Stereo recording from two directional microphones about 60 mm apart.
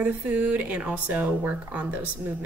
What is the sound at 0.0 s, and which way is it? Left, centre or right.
A woman's voice, right.